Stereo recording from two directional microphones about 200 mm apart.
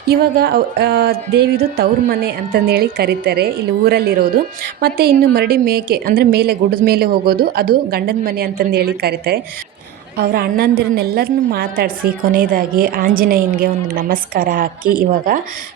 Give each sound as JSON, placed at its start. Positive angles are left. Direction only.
{"t": 0.1, "sound": "a woman's voice", "side_deg": -50}